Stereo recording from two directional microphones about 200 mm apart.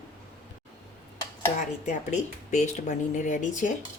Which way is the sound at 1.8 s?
35° left (ahead or behind).